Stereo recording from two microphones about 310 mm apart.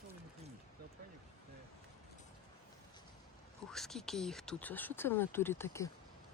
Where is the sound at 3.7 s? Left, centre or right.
Centre.